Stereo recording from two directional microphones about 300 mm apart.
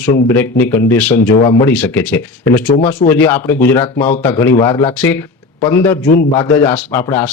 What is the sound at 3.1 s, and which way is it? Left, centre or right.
Speech, centre.